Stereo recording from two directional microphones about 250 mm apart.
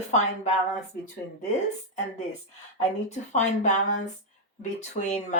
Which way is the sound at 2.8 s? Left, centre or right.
Left.